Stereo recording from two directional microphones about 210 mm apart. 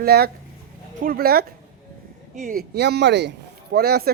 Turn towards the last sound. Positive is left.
turn(degrees=-50)  # may be behind; listen again after turning